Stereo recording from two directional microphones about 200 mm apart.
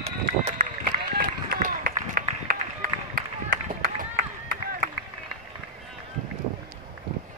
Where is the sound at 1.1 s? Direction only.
45° right (ahead or behind).